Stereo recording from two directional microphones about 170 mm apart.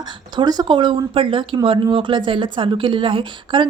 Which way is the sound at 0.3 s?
25° right (ahead or behind).